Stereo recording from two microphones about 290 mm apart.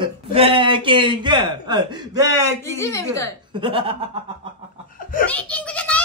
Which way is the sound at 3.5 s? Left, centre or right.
Centre.